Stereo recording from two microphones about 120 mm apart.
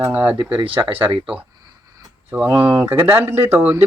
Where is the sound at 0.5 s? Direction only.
45° right (ahead or behind).